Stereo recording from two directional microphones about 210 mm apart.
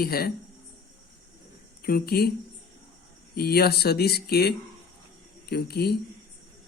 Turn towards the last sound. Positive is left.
turn(degrees=50)  # may be behind; listen again after turning